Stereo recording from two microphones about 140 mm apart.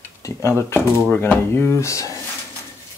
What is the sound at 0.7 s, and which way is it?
Speech, 15° left (ahead or behind).